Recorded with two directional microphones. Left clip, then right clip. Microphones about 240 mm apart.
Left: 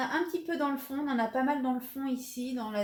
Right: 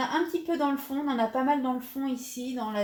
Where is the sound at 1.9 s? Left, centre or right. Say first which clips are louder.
Right 4 dB; centre.